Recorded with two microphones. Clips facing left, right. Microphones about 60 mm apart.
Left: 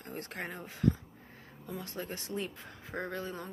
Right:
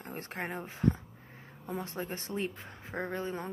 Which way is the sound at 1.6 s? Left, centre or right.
Right.